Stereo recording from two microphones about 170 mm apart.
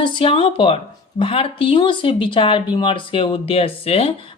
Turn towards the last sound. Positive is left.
turn(degrees=35)  # may be behind; listen again after turning